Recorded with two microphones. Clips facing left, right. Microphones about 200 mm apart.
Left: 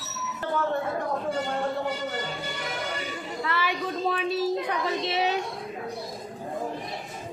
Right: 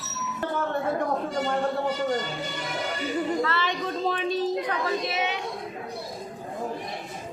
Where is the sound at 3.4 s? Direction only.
10° left (ahead or behind).